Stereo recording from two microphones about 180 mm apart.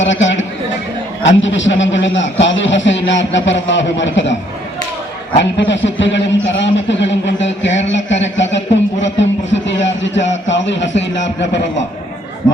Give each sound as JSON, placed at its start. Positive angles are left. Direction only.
{"t": 0.0, "sound": "a man's voice", "side_deg": 90}
{"t": 5.4, "sound": "a man's voice", "side_deg": 90}